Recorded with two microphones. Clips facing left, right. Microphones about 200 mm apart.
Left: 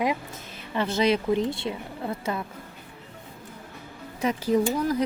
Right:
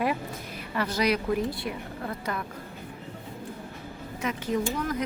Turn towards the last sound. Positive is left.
turn(degrees=35)  # may be behind; listen again after turning